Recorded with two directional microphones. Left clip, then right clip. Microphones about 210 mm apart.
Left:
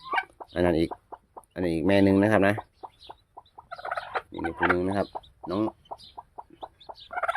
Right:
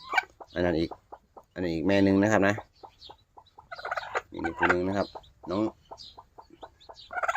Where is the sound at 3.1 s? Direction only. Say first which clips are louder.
Left 4 dB; 40° left (ahead or behind).